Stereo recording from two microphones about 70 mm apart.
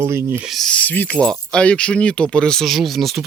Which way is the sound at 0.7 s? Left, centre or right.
Left.